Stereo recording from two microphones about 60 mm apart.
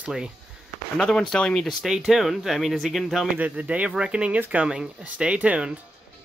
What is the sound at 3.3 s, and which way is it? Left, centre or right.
Speech, right.